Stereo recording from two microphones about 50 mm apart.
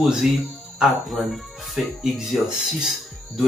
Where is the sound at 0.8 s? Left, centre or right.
Centre.